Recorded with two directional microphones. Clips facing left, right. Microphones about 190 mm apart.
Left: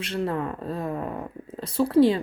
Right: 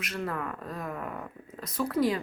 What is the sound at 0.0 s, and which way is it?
Speech, 30° left (ahead or behind).